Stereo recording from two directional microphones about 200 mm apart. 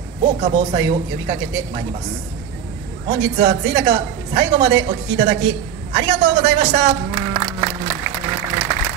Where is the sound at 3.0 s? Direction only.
20° right (ahead or behind).